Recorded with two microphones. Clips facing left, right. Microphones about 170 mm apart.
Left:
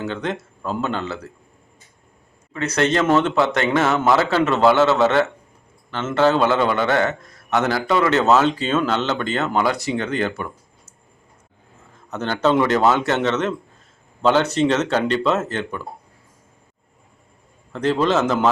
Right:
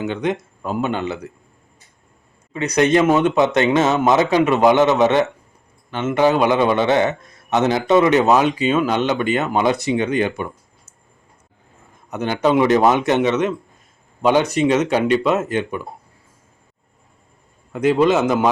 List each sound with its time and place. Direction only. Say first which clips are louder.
0.0 s a man's voice: right 4 dB; 15° right (ahead or behind)
2.5 s a man's voice: right 4 dB; 15° right (ahead or behind)
11.9 s a man's voice: right 2 dB; 15° right (ahead or behind)
17.7 s a man's voice: right 4 dB; 10° right (ahead or behind)